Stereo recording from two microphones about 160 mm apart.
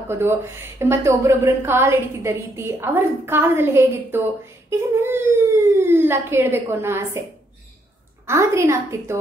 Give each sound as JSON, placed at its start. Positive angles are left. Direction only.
{"t": 0.1, "sound": "a woman's voice", "side_deg": -15}
{"t": 8.3, "sound": "a woman's voice", "side_deg": -20}